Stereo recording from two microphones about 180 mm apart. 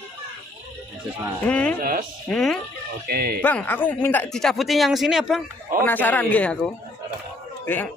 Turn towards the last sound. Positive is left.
turn(degrees=10)  # may be behind; listen again after turning